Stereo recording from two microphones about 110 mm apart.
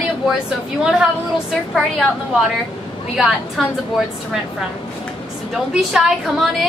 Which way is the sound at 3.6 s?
Centre (ahead or behind).